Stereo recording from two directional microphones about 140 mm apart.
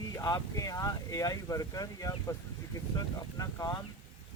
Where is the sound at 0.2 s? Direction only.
25° left (ahead or behind).